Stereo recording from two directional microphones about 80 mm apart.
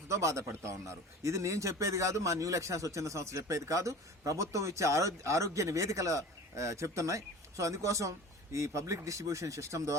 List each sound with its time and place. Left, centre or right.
0.1 s a man's voice: right